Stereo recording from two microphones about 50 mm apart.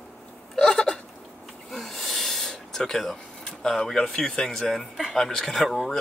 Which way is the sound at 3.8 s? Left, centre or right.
Centre.